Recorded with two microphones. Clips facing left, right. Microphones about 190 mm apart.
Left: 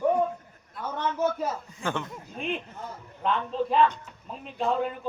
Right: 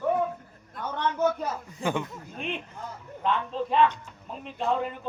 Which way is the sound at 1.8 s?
10° right (ahead or behind).